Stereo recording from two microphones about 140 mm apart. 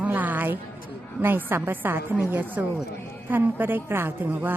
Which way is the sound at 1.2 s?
15° right (ahead or behind).